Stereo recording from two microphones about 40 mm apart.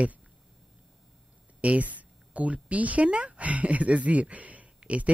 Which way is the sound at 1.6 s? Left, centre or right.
Right.